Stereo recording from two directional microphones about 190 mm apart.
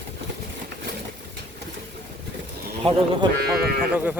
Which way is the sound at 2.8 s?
25° right (ahead or behind).